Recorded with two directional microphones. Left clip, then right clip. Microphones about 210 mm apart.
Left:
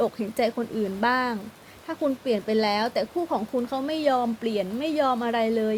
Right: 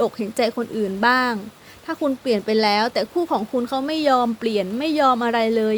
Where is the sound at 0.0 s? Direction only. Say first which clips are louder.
Right 4 dB; 15° right (ahead or behind).